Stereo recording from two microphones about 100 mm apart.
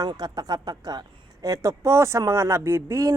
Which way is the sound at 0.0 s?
40° right (ahead or behind).